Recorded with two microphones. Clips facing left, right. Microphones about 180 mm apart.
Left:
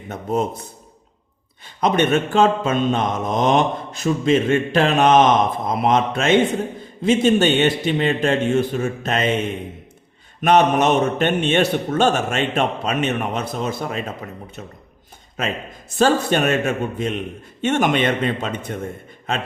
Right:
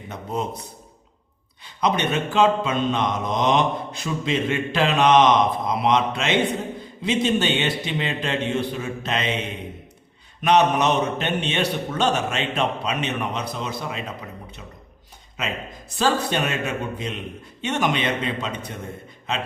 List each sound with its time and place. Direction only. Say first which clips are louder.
0.1 s speech: left 6 dB; 50° left (ahead or behind)
1.6 s speech: left 4 dB; 50° left (ahead or behind)
10.4 s speech: left 3 dB; 50° left (ahead or behind)
16.0 s speech: left 5 dB; 50° left (ahead or behind)